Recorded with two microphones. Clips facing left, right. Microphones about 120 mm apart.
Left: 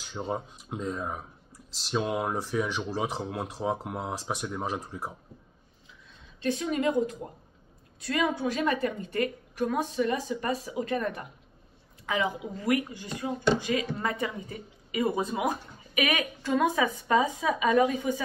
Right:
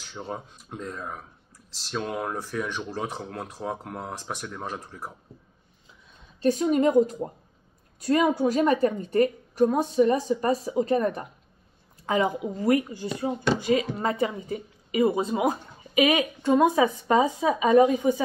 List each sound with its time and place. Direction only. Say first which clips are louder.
0.1 s speech: left 3 dB; 10° left (ahead or behind)
6.4 s a woman's voice: right 6 dB; 35° right (ahead or behind)